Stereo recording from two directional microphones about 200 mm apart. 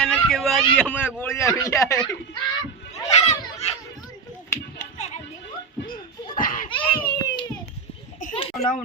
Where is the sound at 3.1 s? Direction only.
35° left (ahead or behind).